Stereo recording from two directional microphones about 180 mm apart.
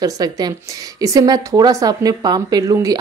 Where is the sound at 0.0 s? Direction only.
20° right (ahead or behind).